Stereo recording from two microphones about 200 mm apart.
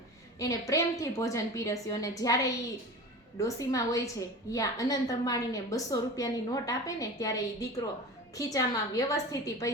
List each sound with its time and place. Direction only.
0.3 s a woman's voice: 15° left (ahead or behind)
8.4 s a woman's voice: 15° left (ahead or behind)